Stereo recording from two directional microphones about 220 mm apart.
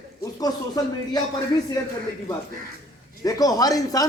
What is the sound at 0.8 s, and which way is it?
Speech, 15° left (ahead or behind).